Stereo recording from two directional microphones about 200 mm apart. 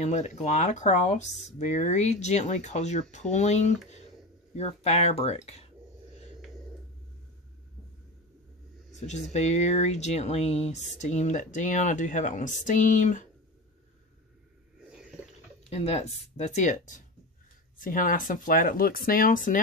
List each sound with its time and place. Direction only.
0.0 s speech: 35° left (ahead or behind)
8.9 s speech: 35° left (ahead or behind)
14.9 s water: 5° right (ahead or behind)
15.7 s speech: 30° left (ahead or behind)